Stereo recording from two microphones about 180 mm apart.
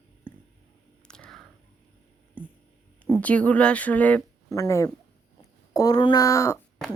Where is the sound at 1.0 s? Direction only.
5° left (ahead or behind).